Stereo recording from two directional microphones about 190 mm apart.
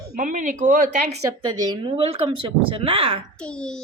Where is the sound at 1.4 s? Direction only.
20° right (ahead or behind).